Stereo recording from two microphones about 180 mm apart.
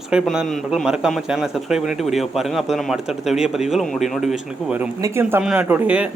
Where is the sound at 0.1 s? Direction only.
Centre (ahead or behind).